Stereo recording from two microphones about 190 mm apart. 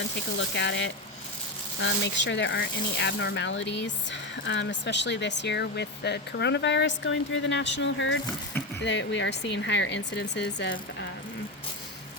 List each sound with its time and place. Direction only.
0.3 s speech: 70° left (ahead or behind)
8.8 s speech: 70° left (ahead or behind)